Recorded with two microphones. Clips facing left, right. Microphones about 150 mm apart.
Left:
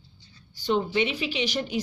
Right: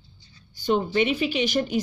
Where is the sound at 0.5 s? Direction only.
50° right (ahead or behind).